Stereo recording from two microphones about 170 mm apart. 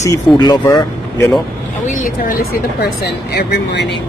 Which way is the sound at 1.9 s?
55° left (ahead or behind).